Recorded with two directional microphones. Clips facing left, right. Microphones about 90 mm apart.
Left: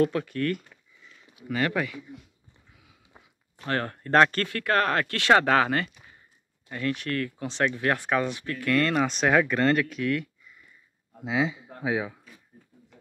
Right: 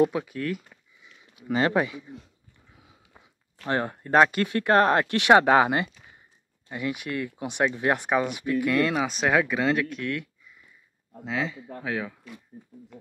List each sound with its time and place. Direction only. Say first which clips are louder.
0.0 s speech: right 1 dB; 10° right (ahead or behind)
1.5 s speech: right 4 dB; 25° right (ahead or behind)
3.6 s speech: right 2 dB; 15° right (ahead or behind); by 10.6 s centre (ahead or behind)
11.2 s speech: left 3 dB; 15° left (ahead or behind)